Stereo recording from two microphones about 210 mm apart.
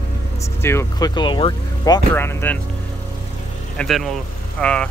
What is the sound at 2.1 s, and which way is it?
Speech, 10° left (ahead or behind).